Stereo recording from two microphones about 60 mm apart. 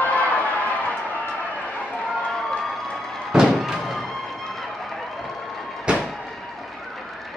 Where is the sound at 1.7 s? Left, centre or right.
Left.